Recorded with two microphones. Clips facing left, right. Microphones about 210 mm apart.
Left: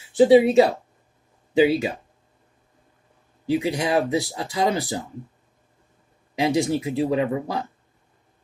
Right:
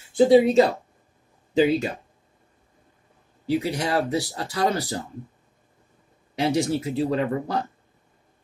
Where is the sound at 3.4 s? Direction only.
15° left (ahead or behind).